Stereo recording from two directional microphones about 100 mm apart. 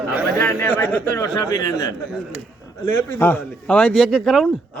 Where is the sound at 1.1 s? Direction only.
35° left (ahead or behind).